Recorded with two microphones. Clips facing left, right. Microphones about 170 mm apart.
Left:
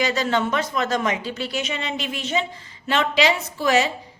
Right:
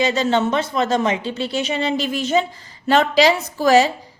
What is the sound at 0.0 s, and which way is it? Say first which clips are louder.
Speech: right 4 dB; 25° right (ahead or behind).